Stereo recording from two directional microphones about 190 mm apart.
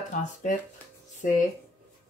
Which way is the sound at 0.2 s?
40° left (ahead or behind).